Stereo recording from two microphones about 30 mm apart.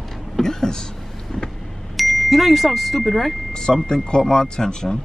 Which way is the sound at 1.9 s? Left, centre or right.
Centre.